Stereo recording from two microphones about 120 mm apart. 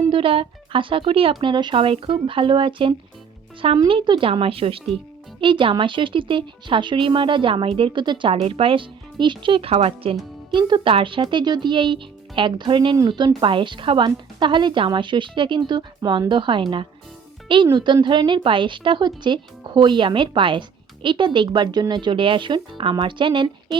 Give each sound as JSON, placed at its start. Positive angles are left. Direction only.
{"t": 0.1, "sound": "speech", "side_deg": -50}
{"t": 8.3, "sound": "speech", "side_deg": -55}